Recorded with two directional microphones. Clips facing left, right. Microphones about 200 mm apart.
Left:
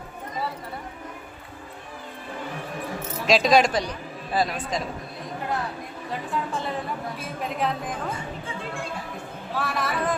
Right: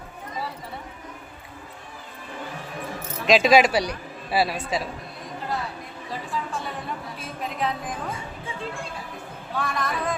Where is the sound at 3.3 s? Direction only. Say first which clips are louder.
Right 2 dB; centre (ahead or behind).